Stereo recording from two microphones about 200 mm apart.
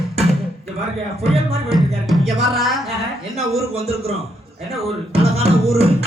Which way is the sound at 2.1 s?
Centre (ahead or behind).